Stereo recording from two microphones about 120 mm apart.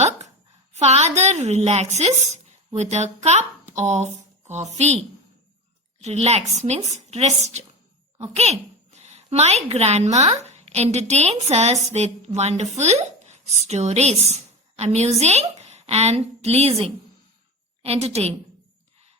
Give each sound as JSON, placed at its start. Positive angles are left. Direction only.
{"t": 0.8, "sound": "a woman's voice", "side_deg": -65}